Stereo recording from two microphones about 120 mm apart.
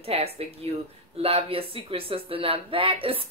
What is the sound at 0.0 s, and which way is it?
Speech, 60° right (ahead or behind).